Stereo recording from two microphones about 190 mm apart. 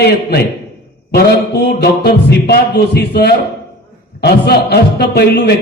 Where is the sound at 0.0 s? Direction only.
60° left (ahead or behind).